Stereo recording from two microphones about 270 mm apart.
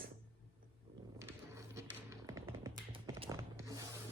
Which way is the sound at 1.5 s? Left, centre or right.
Centre.